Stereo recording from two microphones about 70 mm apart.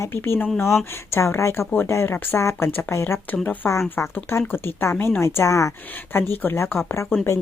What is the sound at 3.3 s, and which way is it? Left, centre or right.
Speech, left.